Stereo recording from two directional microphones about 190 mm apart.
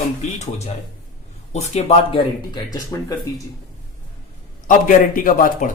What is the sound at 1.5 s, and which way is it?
Speech, 35° left (ahead or behind).